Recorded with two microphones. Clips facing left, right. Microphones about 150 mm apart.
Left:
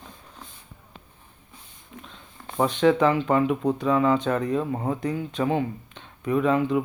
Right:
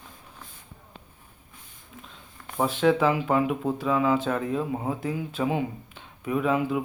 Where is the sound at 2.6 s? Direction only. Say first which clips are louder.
Left 2 dB; 5° right (ahead or behind).